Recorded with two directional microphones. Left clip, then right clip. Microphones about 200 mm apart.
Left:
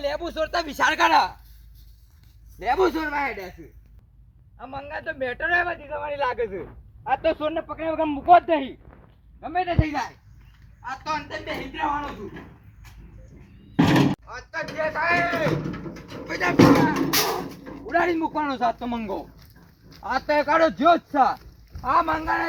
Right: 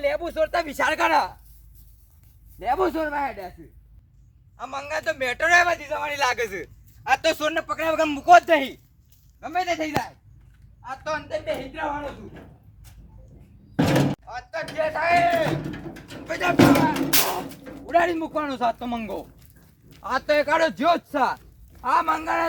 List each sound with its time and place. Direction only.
0.0 s speech: 5° left (ahead or behind)
2.7 s speech: 60° right (ahead or behind)
4.5 s a man's voice: 35° right (ahead or behind); by 9.9 s centre (ahead or behind)
11.1 s speech: 15° right (ahead or behind)
13.7 s a man's voice: centre (ahead or behind)